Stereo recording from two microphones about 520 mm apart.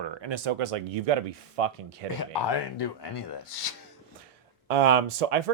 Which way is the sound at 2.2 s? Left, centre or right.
Left.